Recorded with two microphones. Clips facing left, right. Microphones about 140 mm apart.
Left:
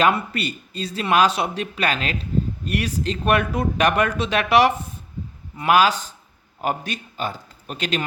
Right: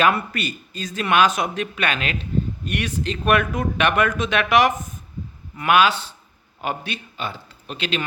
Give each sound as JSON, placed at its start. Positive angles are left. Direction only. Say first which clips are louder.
{"t": 0.0, "sound": "speech", "louder": "even", "side_deg": 30}